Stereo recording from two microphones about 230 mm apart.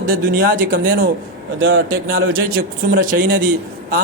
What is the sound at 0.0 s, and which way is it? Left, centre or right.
Speech, right.